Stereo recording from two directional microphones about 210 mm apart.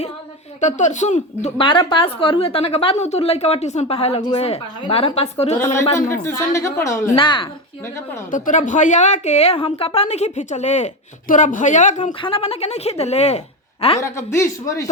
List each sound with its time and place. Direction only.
0.6 s a woman's voice: 35° left (ahead or behind)
5.5 s a woman's voice: 15° left (ahead or behind)
7.2 s a woman's voice: 25° left (ahead or behind)
8.3 s speech: 35° left (ahead or behind)
14.0 s a woman's voice: 15° left (ahead or behind)